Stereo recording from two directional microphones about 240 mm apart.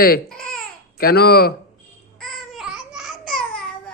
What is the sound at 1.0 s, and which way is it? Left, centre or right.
Speech, left.